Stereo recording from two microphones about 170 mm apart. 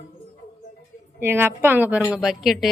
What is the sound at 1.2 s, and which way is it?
A woman's voice, 15° right (ahead or behind).